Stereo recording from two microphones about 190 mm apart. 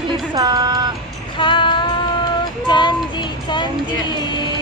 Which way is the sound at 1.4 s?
25° left (ahead or behind).